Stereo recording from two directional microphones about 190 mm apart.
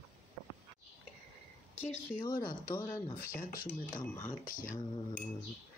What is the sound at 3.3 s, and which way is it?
Speech, 45° left (ahead or behind).